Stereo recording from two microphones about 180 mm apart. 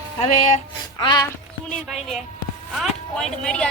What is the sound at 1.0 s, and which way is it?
Speech, 25° left (ahead or behind).